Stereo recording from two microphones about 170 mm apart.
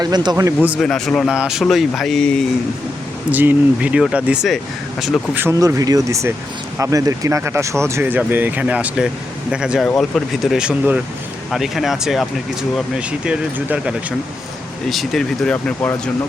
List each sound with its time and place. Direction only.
0.0 s speech: 25° right (ahead or behind)
0.8 s speech: 5° left (ahead or behind)
3.3 s speech: 10° right (ahead or behind)
5.4 s speech: 15° right (ahead or behind); by 16.0 s 10° left (ahead or behind)